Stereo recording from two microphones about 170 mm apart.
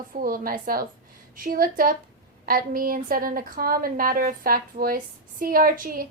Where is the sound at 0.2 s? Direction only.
60° right (ahead or behind).